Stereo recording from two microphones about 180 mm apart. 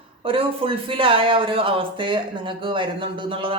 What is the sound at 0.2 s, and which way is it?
A man's voice, 30° right (ahead or behind).